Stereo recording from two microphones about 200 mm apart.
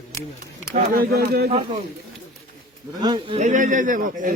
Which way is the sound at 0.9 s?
50° right (ahead or behind).